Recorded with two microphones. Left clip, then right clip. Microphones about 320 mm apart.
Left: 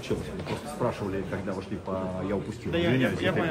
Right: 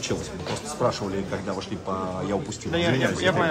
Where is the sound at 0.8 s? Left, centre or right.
Right.